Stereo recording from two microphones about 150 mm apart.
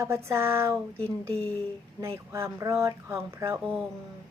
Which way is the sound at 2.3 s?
20° right (ahead or behind).